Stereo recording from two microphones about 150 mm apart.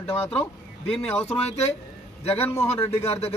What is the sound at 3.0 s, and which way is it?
Speech, 40° left (ahead or behind).